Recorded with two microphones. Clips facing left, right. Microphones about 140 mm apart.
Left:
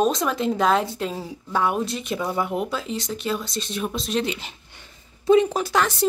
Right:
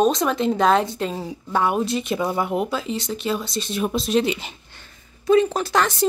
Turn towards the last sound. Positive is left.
turn(degrees=5)  # may be behind; listen again after turning